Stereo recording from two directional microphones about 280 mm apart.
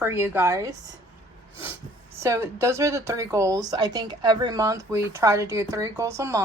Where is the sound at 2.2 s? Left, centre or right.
Centre.